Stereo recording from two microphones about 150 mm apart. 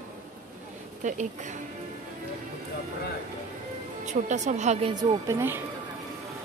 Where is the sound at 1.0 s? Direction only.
55° right (ahead or behind).